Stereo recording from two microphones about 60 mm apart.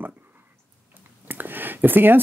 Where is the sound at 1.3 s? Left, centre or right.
Right.